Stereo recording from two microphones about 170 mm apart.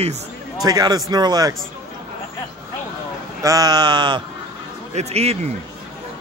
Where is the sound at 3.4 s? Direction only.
20° right (ahead or behind).